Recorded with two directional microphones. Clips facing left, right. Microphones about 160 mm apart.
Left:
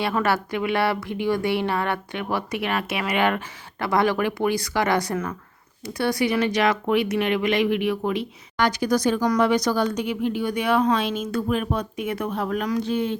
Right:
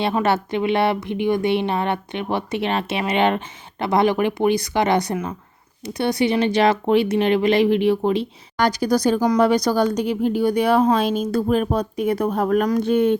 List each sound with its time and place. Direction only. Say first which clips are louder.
0.0 s a woman's voice: right 3 dB; 20° right (ahead or behind); by 13.1 s 55° right (ahead or behind)